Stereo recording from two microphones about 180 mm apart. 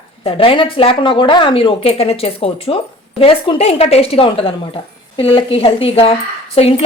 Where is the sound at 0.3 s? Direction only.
30° left (ahead or behind).